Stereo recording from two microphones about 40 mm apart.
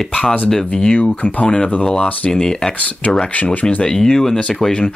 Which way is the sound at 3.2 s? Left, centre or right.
Left.